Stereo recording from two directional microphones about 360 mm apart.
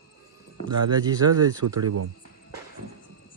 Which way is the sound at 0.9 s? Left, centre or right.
Centre.